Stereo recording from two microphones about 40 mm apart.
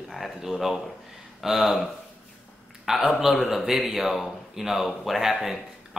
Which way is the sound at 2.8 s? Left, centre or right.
Centre.